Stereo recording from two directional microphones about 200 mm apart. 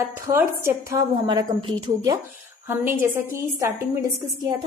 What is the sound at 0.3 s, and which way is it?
A woman's voice, 10° right (ahead or behind).